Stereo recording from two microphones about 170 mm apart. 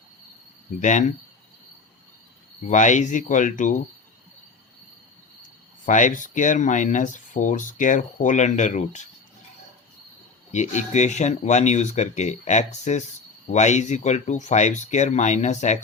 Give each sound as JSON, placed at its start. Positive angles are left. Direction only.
{"t": 0.8, "sound": "speech", "side_deg": 45}
{"t": 2.6, "sound": "speech", "side_deg": 45}
{"t": 5.8, "sound": "speech", "side_deg": 45}
{"t": 10.5, "sound": "speech", "side_deg": 45}